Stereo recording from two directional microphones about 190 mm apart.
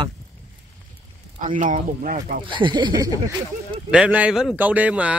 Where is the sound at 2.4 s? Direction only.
25° right (ahead or behind).